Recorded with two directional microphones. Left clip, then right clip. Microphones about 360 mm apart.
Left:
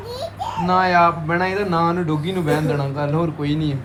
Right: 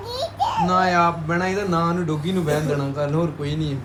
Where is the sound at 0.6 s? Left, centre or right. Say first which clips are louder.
Left 4 dB; centre.